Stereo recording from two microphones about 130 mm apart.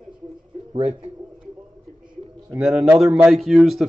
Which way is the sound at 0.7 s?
50° right (ahead or behind).